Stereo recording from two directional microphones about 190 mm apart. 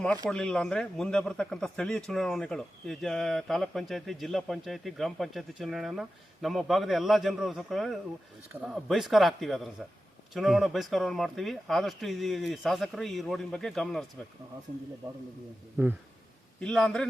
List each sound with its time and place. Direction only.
0.3 s speech: 5° left (ahead or behind)
15.0 s a man's voice: 20° right (ahead or behind)
16.6 s speech: 5° left (ahead or behind)